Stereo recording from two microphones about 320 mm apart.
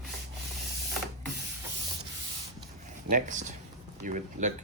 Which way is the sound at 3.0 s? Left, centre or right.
Right.